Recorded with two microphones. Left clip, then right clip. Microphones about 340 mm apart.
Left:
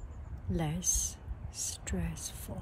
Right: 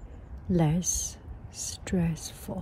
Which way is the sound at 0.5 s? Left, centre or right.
Right.